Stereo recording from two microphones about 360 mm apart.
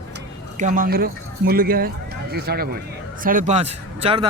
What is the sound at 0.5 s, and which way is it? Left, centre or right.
Speech, right.